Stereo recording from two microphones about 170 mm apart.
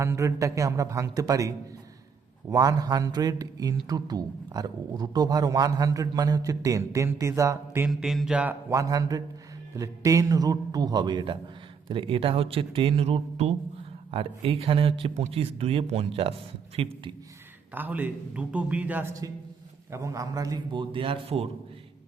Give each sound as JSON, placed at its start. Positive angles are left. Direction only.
{"t": 0.0, "sound": "a man's voice", "side_deg": -15}
{"t": 7.9, "sound": "a sound", "side_deg": 0}
{"t": 8.7, "sound": "a man's voice", "side_deg": -20}
{"t": 17.7, "sound": "a man's voice", "side_deg": -10}